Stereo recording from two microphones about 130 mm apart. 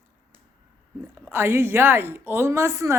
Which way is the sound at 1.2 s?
20° right (ahead or behind).